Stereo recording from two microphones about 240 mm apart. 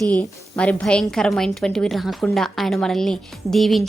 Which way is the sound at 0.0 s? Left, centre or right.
Centre.